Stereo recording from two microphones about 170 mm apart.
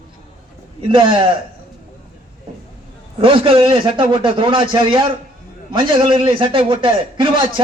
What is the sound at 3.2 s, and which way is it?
A man's voice, 30° right (ahead or behind).